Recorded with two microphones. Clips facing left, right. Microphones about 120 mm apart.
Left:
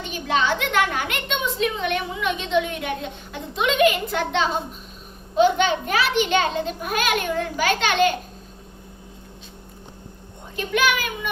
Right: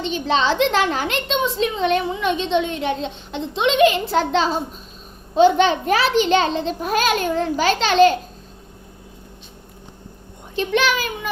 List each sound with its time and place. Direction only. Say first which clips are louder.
0.3 s a woman's voice: right 2 dB; 30° right (ahead or behind)
10.5 s a woman's voice: right 3 dB; 30° right (ahead or behind)